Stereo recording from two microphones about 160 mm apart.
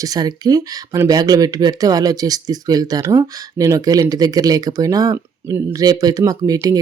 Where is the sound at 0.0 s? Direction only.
25° right (ahead or behind).